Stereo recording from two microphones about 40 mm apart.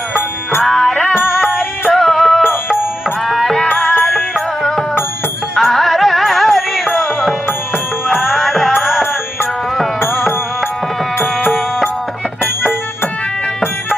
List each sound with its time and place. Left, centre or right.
0.6 s music: centre
2.4 s music: left
3.2 s music: centre
5.5 s music: centre
8.0 s music: centre
10.0 s music: left